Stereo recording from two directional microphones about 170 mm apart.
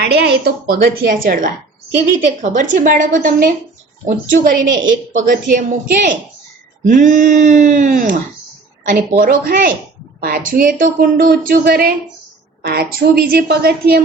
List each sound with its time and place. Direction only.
0.0 s speech: 75° right (ahead or behind)